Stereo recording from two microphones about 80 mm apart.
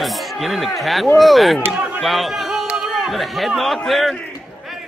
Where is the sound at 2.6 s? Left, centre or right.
Centre.